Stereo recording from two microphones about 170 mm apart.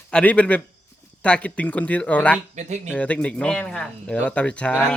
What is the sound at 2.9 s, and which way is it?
Speech, 5° left (ahead or behind).